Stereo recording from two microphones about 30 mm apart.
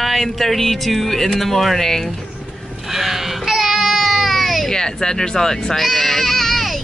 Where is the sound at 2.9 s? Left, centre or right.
Centre.